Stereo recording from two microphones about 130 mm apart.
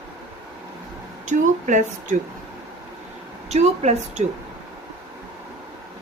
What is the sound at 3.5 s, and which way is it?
Speech, 60° right (ahead or behind).